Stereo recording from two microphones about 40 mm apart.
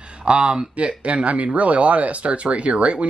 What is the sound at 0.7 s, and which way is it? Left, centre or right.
Speech, right.